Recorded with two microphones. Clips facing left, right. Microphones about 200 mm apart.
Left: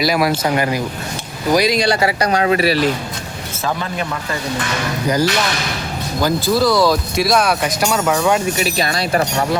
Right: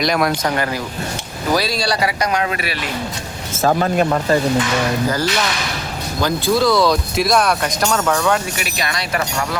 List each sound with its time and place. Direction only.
0.0 s speech: 5° left (ahead or behind); by 2.9 s 35° left (ahead or behind)
3.6 s speech: 45° right (ahead or behind)
5.0 s speech: 15° left (ahead or behind)
6.2 s speech: 5° left (ahead or behind)
8.5 s speech: 30° left (ahead or behind)